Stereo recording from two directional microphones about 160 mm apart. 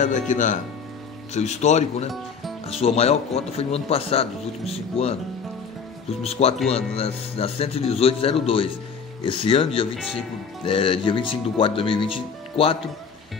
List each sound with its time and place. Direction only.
0.0 s speech: 50° left (ahead or behind)
6.2 s speech: 40° left (ahead or behind)